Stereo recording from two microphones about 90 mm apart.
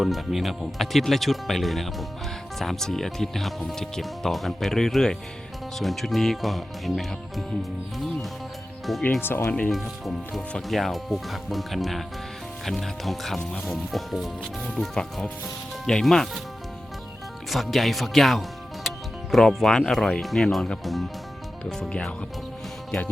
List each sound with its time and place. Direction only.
0.0 s speech: centre (ahead or behind)
9.2 s speech: 25° left (ahead or behind)
9.6 s speech: 5° left (ahead or behind)
17.5 s speech: centre (ahead or behind)